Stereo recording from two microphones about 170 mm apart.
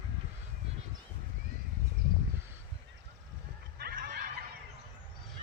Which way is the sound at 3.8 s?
65° right (ahead or behind).